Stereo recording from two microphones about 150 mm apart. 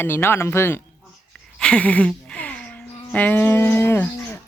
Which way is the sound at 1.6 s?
5° left (ahead or behind).